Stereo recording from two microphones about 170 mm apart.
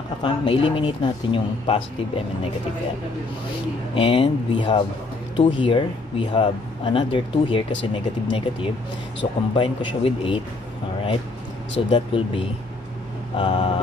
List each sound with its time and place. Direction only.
0.2 s speech: 30° left (ahead or behind)
3.9 s speech: 35° left (ahead or behind)
11.9 s speech: 30° left (ahead or behind)